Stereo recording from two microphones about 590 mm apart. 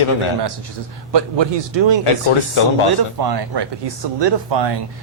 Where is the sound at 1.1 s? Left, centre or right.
Right.